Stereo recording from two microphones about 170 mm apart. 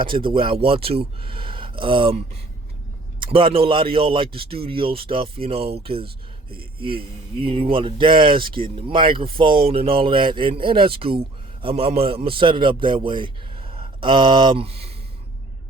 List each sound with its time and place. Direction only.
0.0 s a man's voice: 30° right (ahead or behind)